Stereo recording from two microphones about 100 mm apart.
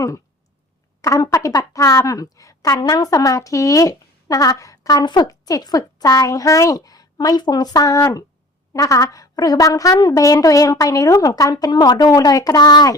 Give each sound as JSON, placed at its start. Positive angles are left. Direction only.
{"t": 1.0, "sound": "a woman's voice", "side_deg": 30}